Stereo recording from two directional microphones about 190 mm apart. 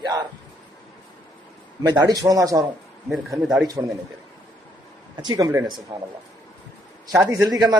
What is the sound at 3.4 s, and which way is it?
Speech, 5° right (ahead or behind).